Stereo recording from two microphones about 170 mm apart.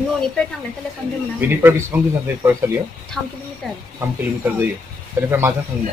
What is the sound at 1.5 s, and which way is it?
Speech, 15° right (ahead or behind).